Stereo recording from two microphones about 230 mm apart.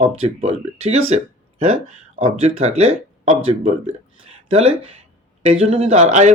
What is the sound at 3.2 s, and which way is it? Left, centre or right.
Speech, right.